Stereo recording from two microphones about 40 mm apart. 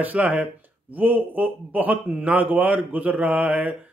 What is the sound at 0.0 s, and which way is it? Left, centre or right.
A man's voice, right.